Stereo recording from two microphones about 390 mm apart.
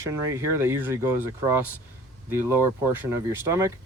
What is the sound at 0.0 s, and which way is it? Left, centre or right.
Speech, centre.